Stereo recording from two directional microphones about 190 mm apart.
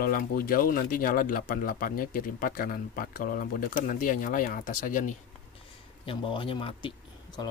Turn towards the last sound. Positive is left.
turn(degrees=25)  # may be behind; listen again after turning